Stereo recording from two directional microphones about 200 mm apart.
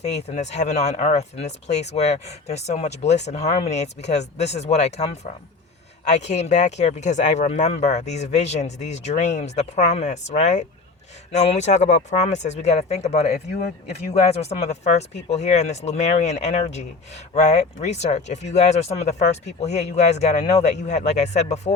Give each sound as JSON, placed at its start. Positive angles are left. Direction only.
{"t": 0.2, "sound": "speech", "side_deg": 35}